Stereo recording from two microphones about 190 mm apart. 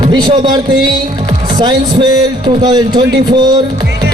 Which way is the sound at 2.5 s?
20° right (ahead or behind).